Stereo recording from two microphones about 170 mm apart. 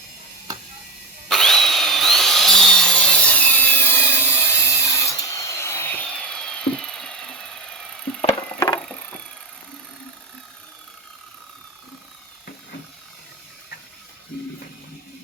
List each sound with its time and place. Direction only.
1.3 s tools: centre (ahead or behind)
8.5 s vehicle: 20° left (ahead or behind)